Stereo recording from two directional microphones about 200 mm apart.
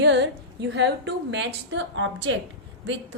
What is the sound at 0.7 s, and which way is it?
A woman's voice, 60° right (ahead or behind).